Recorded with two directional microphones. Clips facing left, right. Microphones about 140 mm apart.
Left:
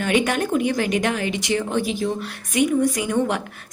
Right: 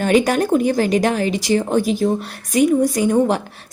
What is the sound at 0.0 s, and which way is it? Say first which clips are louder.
A woman's voice: right 5 dB; 40° right (ahead or behind).